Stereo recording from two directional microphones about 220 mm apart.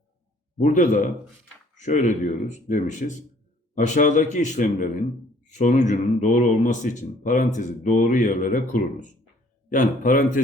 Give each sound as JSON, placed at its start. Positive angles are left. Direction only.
{"t": 0.6, "sound": "speech", "side_deg": 35}